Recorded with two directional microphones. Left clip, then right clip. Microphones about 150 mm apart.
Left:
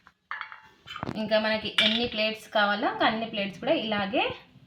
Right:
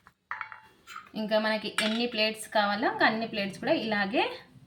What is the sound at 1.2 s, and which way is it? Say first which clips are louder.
A woman's voice: left 2 dB; 15° left (ahead or behind).